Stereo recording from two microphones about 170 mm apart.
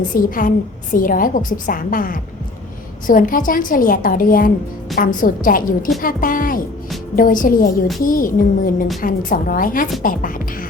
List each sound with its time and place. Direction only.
0.1 s a woman's voice: 55° left (ahead or behind)